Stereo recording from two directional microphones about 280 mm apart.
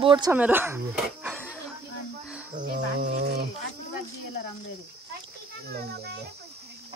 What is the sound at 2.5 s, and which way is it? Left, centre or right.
Cricket, right.